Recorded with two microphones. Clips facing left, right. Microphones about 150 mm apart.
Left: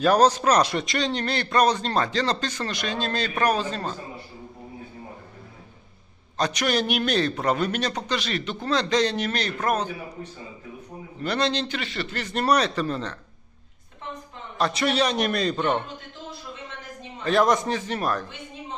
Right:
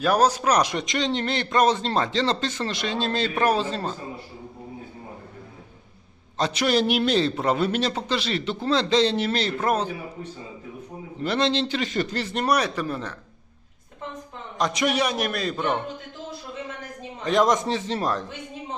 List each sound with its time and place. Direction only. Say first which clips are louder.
0.0 s a man's voice: left 2 dB; 10° right (ahead or behind); by 3.8 s 25° right (ahead or behind)
6.3 s a man's voice: right 2 dB; 25° right (ahead or behind)
11.2 s a man's voice: right 2 dB; 25° right (ahead or behind)
11.9 s a man's voice: right 5 dB; 40° right (ahead or behind)
12.2 s a man's voice: left 3 dB; 20° right (ahead or behind)
14.6 s a man's voice: even; 15° right (ahead or behind)
17.2 s a man's voice: even; 20° right (ahead or behind)